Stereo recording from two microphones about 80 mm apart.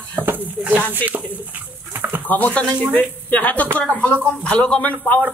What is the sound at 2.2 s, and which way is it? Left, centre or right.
A man's voice, centre.